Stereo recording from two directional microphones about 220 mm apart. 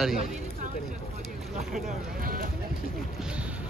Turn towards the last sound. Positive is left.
turn(degrees=-5)  # may be behind; listen again after turning